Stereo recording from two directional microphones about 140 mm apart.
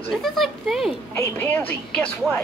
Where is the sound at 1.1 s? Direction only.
15° left (ahead or behind).